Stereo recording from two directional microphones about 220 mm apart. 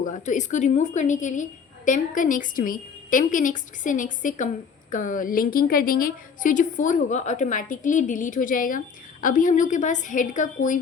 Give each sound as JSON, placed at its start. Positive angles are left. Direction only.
{"t": 0.0, "sound": "a woman's voice", "side_deg": 35}